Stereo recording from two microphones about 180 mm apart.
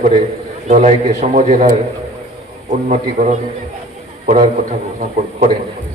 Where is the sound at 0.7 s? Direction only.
40° right (ahead or behind).